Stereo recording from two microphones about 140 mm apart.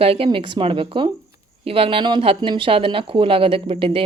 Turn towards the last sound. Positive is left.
turn(degrees=-40)  # may be behind; listen again after turning